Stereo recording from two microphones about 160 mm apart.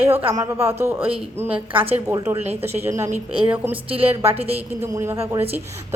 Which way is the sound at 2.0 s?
20° right (ahead or behind).